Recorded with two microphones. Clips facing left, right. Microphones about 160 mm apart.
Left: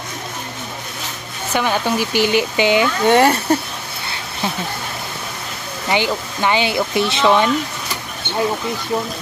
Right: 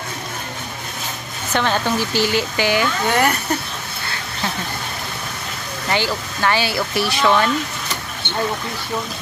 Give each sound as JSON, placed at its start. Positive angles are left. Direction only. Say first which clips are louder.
{"t": 1.5, "sound": "speech", "louder": "left 1 dB", "side_deg": 10}
{"t": 5.9, "sound": "speech", "louder": "left 3 dB", "side_deg": 20}